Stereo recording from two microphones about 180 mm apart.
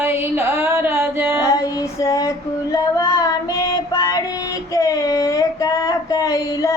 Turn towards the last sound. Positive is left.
turn(degrees=20)  # may be behind; listen again after turning